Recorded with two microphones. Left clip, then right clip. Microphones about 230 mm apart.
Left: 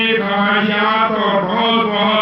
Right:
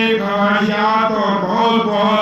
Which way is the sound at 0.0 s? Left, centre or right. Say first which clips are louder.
Even; right.